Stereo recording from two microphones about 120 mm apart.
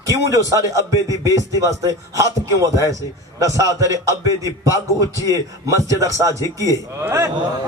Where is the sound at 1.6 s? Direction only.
25° right (ahead or behind).